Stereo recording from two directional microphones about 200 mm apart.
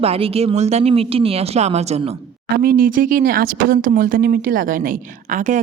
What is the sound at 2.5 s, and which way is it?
Speech, 50° right (ahead or behind).